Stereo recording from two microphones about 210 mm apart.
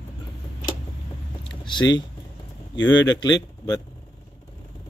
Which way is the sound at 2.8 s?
15° left (ahead or behind).